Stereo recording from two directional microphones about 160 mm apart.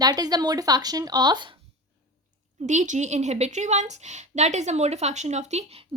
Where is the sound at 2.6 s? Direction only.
50° right (ahead or behind).